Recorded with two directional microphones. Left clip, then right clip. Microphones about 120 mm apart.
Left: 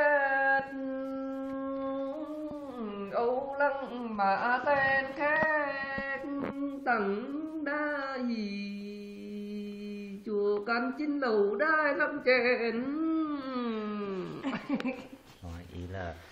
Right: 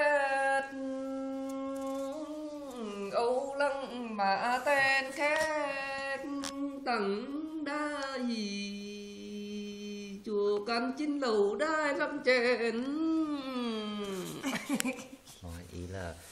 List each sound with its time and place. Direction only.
0.0 s wind instrument: 20° right (ahead or behind)
2.8 s a sound: 30° right (ahead or behind)
4.0 s a woman's voice: 15° right (ahead or behind)
5.5 s child singing: 15° right (ahead or behind)
6.9 s a sound: 20° right (ahead or behind)
10.5 s a woman's voice: 15° right (ahead or behind)